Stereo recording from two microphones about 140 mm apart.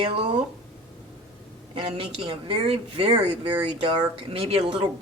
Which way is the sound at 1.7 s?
40° right (ahead or behind).